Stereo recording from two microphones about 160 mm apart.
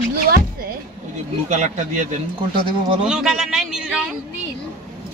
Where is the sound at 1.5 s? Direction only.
50° right (ahead or behind).